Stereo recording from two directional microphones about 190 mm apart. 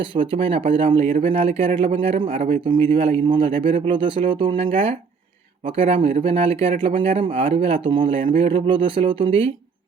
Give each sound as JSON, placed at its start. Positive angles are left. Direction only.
{"t": 0.0, "sound": "speech", "side_deg": -25}